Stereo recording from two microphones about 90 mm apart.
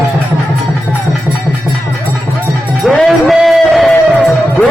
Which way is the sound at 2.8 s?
Centre (ahead or behind).